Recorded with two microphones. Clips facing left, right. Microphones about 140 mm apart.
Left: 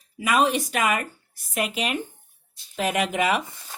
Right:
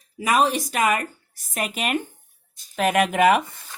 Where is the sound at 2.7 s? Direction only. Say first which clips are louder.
Right 4 dB; 60° right (ahead or behind).